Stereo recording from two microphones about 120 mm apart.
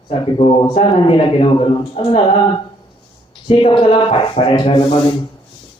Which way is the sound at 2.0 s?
55° left (ahead or behind).